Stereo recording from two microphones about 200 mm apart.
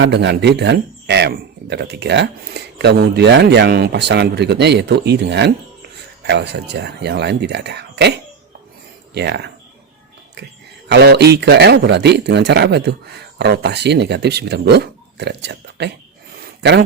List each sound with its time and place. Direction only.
0.0 s speech: 60° right (ahead or behind)
9.1 s speech: 55° right (ahead or behind)
10.8 s speech: 55° right (ahead or behind)